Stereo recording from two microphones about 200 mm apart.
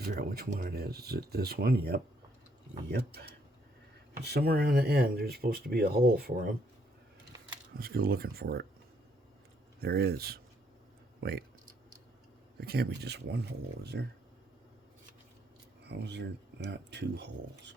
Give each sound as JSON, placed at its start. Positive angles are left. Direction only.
{"t": 0.0, "sound": "speech", "side_deg": -45}
{"t": 7.8, "sound": "speech", "side_deg": -50}
{"t": 9.8, "sound": "speech", "side_deg": -50}
{"t": 12.5, "sound": "speech", "side_deg": -50}
{"t": 15.8, "sound": "speech", "side_deg": -55}